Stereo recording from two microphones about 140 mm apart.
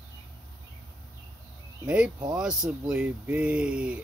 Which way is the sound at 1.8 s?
5° right (ahead or behind).